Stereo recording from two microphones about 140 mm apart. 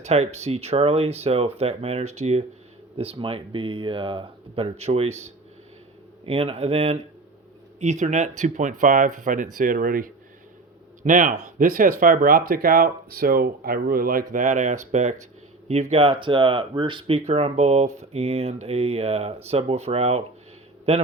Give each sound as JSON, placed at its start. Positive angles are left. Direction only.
{"t": 0.0, "sound": "speech", "side_deg": -50}
{"t": 6.2, "sound": "speech", "side_deg": -45}
{"t": 11.0, "sound": "speech", "side_deg": -70}